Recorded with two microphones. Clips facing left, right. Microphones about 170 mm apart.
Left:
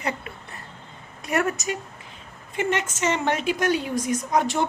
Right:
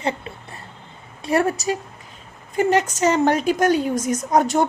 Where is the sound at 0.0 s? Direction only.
30° right (ahead or behind).